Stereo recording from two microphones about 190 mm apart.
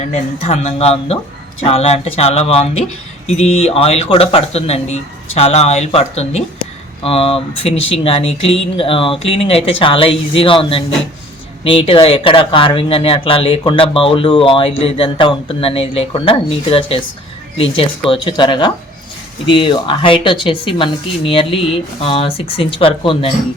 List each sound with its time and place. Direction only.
0.0 s speech: 35° left (ahead or behind)
18.1 s speech: 25° left (ahead or behind)